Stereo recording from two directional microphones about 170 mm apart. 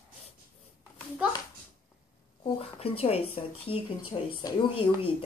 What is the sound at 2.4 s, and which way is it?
Speech, 35° left (ahead or behind).